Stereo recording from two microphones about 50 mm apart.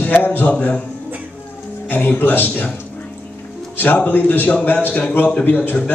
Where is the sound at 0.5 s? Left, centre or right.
Left.